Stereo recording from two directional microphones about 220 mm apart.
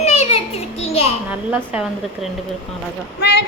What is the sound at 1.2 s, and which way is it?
Speech, 5° right (ahead or behind).